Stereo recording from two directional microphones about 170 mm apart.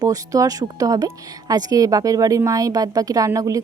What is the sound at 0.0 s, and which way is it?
Speech, 20° right (ahead or behind).